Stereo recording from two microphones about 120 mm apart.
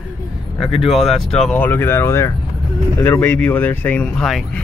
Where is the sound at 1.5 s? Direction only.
15° left (ahead or behind).